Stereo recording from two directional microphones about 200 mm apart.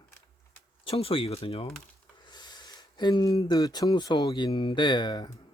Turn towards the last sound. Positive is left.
turn(degrees=20)  # may be behind; listen again after turning